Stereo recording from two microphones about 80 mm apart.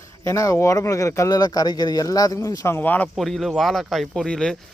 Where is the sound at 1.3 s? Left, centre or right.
Left.